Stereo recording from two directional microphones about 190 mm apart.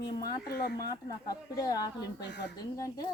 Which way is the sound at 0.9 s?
20° left (ahead or behind).